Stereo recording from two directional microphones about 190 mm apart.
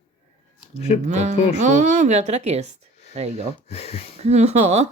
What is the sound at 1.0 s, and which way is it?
Speech, 35° right (ahead or behind).